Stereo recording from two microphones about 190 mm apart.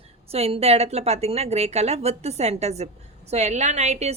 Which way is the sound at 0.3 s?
30° right (ahead or behind).